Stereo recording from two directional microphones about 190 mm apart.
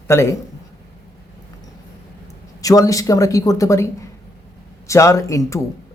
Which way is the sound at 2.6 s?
15° left (ahead or behind).